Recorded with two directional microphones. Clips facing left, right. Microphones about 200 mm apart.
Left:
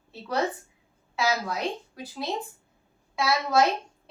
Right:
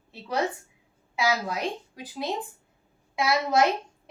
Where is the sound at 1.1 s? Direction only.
15° right (ahead or behind).